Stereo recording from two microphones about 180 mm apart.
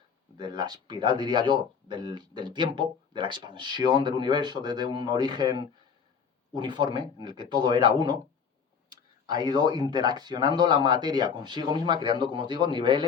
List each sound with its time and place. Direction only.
0.3 s speech: 25° right (ahead or behind)
9.2 s speech: 25° right (ahead or behind)